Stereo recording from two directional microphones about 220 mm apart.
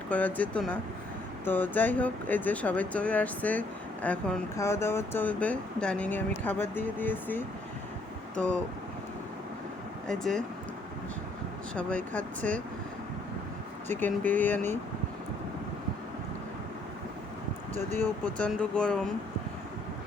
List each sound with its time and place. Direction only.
0.1 s speech: 5° left (ahead or behind)
10.1 s speech: 5° left (ahead or behind)
11.7 s speech: 5° left (ahead or behind)
13.8 s speech: 10° left (ahead or behind)
17.7 s speech: 10° left (ahead or behind)